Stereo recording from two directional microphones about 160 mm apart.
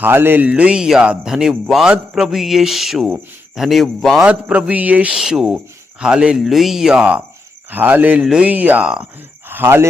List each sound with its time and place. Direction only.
0.0 s a man's voice: 15° right (ahead or behind)